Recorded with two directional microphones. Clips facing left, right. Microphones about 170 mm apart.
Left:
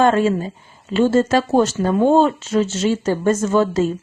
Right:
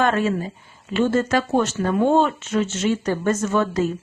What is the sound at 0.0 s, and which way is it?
A woman's voice, 30° left (ahead or behind).